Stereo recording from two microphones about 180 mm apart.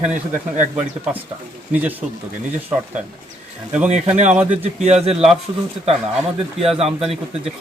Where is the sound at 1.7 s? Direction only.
10° right (ahead or behind).